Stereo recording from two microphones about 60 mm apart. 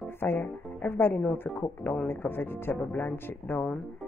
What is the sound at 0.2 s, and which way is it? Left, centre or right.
Music, left.